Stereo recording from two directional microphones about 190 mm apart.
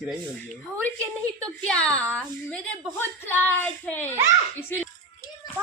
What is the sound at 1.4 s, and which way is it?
A woman's voice, 5° left (ahead or behind).